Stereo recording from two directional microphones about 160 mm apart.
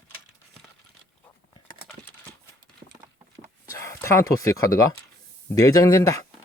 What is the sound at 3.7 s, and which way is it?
Speech, 15° left (ahead or behind).